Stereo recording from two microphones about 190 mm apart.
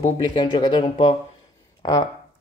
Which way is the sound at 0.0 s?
25° left (ahead or behind).